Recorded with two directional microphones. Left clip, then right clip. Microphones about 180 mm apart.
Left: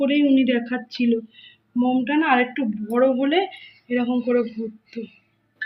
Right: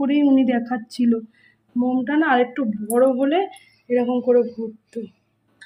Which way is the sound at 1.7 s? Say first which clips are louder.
Even; 20° right (ahead or behind).